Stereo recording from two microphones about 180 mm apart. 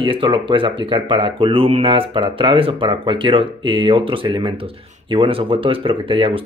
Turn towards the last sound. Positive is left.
turn(degrees=-30)  # may be behind; listen again after turning